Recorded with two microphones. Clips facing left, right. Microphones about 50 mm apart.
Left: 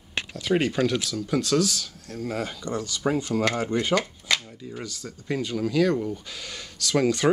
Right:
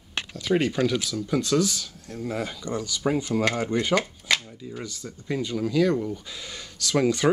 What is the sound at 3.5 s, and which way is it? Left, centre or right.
Speech, centre.